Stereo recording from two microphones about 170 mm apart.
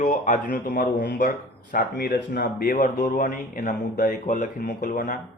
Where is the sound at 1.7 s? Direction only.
65° left (ahead or behind).